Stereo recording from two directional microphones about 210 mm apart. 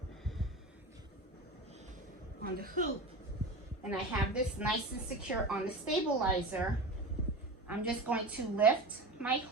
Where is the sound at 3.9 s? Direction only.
5° right (ahead or behind).